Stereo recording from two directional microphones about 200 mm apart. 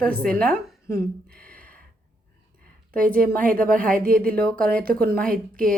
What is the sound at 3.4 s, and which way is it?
Speech, 45° right (ahead or behind).